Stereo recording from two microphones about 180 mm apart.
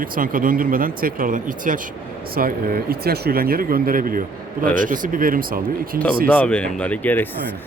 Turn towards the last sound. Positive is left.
turn(degrees=10)  # may be behind; listen again after turning